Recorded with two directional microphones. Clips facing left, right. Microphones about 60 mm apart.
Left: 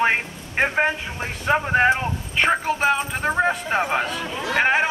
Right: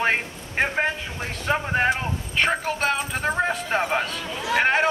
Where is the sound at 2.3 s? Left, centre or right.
Centre.